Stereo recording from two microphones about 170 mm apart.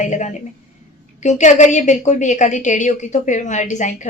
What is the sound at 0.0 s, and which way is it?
A woman's voice, 45° left (ahead or behind).